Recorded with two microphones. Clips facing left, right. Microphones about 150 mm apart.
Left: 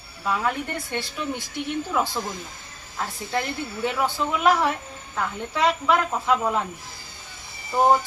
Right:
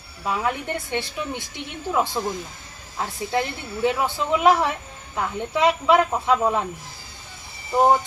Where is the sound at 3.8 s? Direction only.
20° right (ahead or behind).